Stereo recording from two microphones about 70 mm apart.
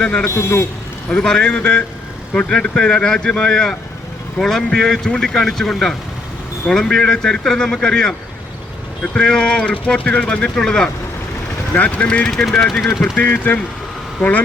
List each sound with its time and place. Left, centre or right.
0.0 s speech: centre
0.3 s a man's voice: left
1.1 s speech: centre
9.1 s speech: centre
13.1 s speech: left